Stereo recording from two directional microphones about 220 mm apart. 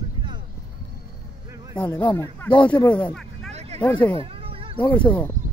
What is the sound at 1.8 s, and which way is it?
Speech, 10° left (ahead or behind).